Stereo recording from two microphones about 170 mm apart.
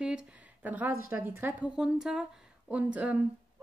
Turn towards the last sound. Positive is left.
turn(degrees=-10)  # may be behind; listen again after turning